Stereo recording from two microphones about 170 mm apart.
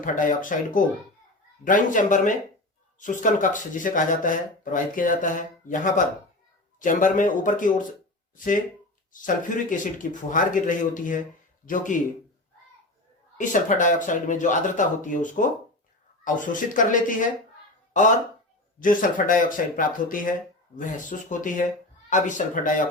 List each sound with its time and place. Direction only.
0.0 s speech: 50° left (ahead or behind)
9.1 s speech: 50° left (ahead or behind)
13.3 s speech: 50° left (ahead or behind)
18.8 s speech: 50° left (ahead or behind)